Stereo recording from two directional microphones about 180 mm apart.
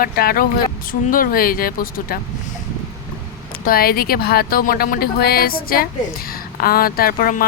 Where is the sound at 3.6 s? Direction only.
55° left (ahead or behind).